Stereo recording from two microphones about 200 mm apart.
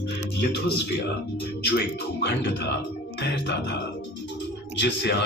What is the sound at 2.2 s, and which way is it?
Speech, 60° left (ahead or behind).